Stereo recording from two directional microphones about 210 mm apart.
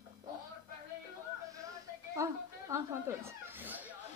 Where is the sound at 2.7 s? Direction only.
10° right (ahead or behind).